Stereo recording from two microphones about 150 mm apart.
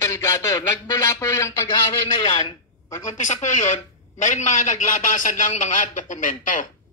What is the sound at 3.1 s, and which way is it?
A man's voice, 55° left (ahead or behind).